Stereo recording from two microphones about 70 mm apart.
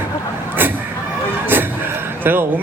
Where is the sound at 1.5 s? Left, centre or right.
Right.